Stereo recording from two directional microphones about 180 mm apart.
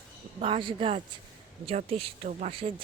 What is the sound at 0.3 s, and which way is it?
Speech, 30° right (ahead or behind).